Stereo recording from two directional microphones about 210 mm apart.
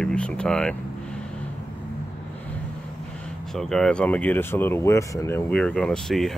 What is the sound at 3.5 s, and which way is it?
Speech, centre (ahead or behind).